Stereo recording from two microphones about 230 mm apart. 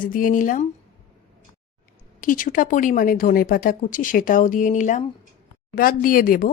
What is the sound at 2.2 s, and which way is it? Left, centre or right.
A woman's voice, left.